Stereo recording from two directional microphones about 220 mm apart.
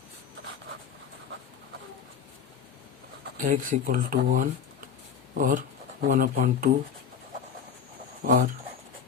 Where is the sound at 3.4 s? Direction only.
40° right (ahead or behind).